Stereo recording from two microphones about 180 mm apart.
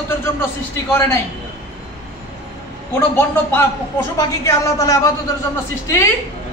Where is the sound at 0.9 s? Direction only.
15° left (ahead or behind).